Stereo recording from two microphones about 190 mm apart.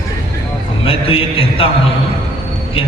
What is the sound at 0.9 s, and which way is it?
Speech, 30° left (ahead or behind).